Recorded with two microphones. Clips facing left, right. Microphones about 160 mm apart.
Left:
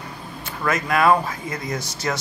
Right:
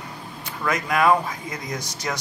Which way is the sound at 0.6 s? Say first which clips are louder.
Left 1 dB; 15° right (ahead or behind).